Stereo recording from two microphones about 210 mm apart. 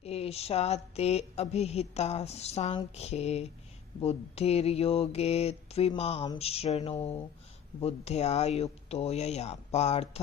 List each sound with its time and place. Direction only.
0.0 s speech: 30° left (ahead or behind)
4.0 s mantra: 30° left (ahead or behind)
7.8 s speech: 30° left (ahead or behind)